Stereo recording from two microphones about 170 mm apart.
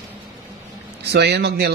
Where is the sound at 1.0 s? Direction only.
75° right (ahead or behind).